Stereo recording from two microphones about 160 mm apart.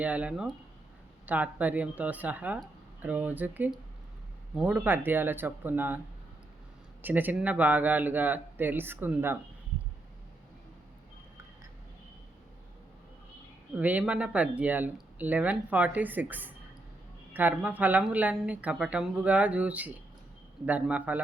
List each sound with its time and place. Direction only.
0.0 s speech: 10° right (ahead or behind)
7.0 s speech: 10° right (ahead or behind)
13.7 s speech: 10° right (ahead or behind)